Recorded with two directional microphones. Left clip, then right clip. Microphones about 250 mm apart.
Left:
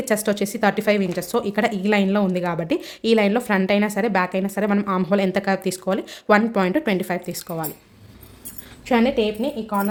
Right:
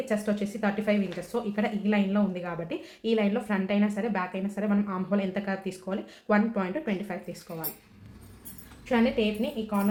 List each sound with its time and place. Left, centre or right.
0.0 s a woman's voice: left
8.9 s a woman's voice: left